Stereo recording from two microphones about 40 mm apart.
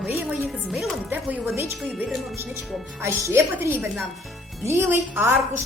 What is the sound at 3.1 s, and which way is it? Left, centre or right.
Speech, right.